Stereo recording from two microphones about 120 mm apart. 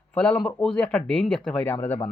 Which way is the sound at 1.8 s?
20° left (ahead or behind).